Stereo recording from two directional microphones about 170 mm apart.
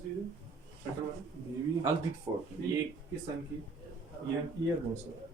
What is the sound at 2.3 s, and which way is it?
Speech, 20° right (ahead or behind).